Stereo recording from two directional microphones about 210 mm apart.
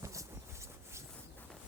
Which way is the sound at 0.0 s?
15° right (ahead or behind).